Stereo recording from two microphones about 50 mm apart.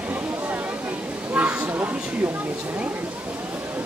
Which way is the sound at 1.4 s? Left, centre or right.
Right.